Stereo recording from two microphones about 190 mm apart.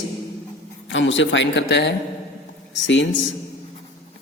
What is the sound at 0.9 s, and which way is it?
A man's voice, 80° left.